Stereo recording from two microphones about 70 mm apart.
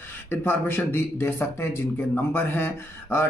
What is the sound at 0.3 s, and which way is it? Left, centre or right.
Speech, left.